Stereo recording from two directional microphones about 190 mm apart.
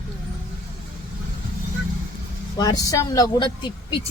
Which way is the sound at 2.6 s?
20° left (ahead or behind).